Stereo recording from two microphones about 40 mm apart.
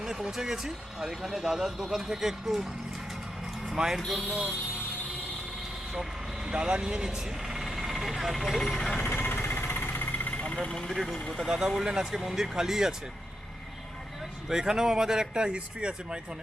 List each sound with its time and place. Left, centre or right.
0.0 s speech: centre
3.8 s speech: centre
4.1 s speech: centre
6.5 s speech: right; by 8.8 s centre
8.8 s speech: centre
9.0 s a sound: left
9.3 s vehicle: left
10.4 s speech: left
11.0 s speech: centre
11.4 s speech: centre
14.5 s speech: centre